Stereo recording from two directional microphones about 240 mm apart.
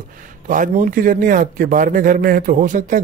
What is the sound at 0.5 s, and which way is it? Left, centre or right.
A man's voice, right.